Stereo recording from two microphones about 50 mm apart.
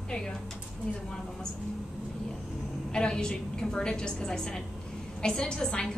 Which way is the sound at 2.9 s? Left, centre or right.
Centre.